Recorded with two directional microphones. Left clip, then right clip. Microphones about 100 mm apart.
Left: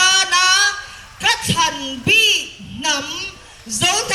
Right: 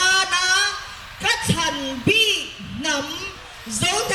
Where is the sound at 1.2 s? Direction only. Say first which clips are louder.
Left 5 dB; 20° left (ahead or behind).